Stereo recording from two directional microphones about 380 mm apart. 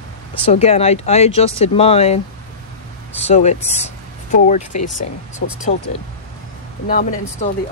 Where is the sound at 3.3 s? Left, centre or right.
Centre.